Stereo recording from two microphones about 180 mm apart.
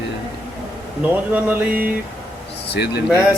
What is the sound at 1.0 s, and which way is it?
Speech, 10° right (ahead or behind).